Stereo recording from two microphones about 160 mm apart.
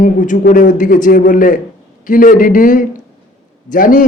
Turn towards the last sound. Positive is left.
turn(degrees=55)  # may be behind; listen again after turning